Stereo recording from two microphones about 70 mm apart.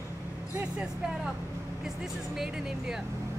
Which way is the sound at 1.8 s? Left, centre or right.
Centre.